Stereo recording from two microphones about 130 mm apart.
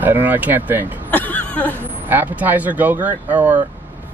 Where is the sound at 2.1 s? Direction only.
15° right (ahead or behind).